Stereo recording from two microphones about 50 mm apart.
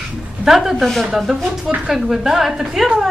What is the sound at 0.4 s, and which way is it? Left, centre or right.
A woman's voice, centre.